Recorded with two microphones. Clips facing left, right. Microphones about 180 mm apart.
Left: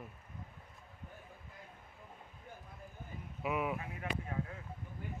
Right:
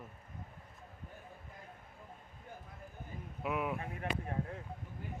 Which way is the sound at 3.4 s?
Centre (ahead or behind).